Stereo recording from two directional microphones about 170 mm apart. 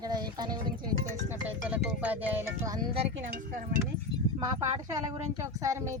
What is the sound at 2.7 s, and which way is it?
Speech, 30° right (ahead or behind).